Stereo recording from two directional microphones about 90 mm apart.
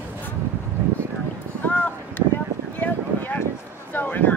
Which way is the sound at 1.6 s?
20° left (ahead or behind).